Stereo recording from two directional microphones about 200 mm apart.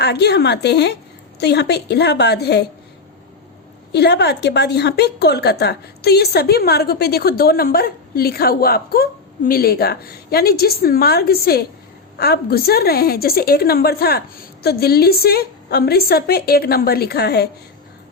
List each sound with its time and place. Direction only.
0.0 s a woman's voice: 55° left (ahead or behind)
3.9 s a woman's voice: 55° left (ahead or behind)